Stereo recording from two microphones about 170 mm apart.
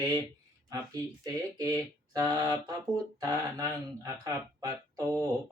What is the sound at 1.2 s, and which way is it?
Speech, 20° right (ahead or behind).